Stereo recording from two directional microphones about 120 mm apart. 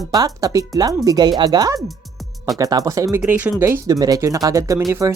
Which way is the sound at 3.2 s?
15° right (ahead or behind).